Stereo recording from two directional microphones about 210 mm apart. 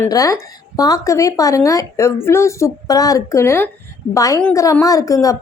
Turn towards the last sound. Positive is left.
turn(degrees=15)  # may be behind; listen again after turning